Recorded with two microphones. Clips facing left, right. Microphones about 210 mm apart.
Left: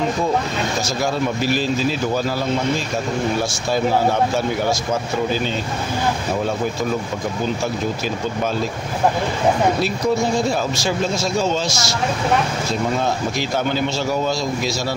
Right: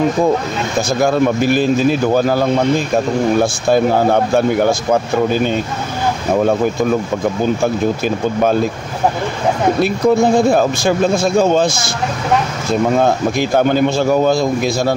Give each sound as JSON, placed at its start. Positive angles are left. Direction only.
{"t": 1.0, "sound": "a man's voice", "side_deg": -55}
{"t": 3.7, "sound": "speech", "side_deg": -55}
{"t": 9.8, "sound": "speech", "side_deg": -55}
{"t": 12.9, "sound": "speech", "side_deg": -55}